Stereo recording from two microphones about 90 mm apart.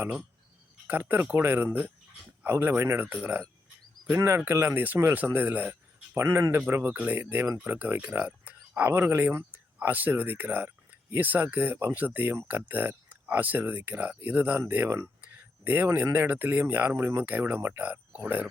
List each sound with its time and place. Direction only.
0.9 s speech: 20° right (ahead or behind)
6.1 s speech: 30° right (ahead or behind)
15.2 s a sound: 20° right (ahead or behind)
16.0 s speech: 25° right (ahead or behind)